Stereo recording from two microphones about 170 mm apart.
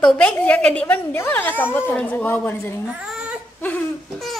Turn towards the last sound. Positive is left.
turn(degrees=10)  # may be behind; listen again after turning